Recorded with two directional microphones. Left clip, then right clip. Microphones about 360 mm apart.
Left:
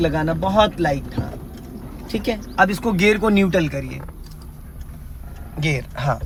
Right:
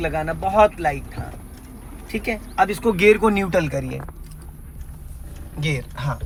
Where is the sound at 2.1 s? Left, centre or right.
Right.